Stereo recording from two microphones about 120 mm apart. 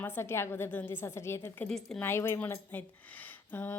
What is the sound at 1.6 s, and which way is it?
Speech, 5° left (ahead or behind).